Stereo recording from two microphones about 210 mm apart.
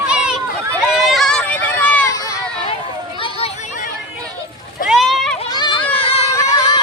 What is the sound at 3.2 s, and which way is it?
Children playing, 25° left (ahead or behind).